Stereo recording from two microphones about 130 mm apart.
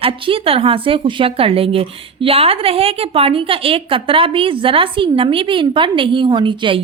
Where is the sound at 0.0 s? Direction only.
45° right (ahead or behind).